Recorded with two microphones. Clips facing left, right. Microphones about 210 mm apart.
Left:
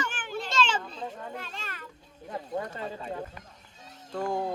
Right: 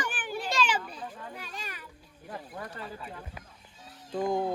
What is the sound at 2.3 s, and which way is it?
Speech, 25° left (ahead or behind).